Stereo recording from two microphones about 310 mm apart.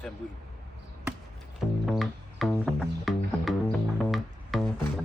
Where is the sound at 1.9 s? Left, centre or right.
Centre.